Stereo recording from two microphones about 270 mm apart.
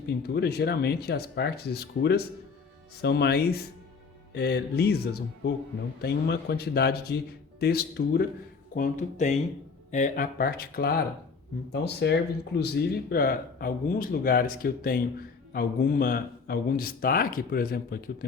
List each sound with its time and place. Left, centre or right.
0.2 s speech: left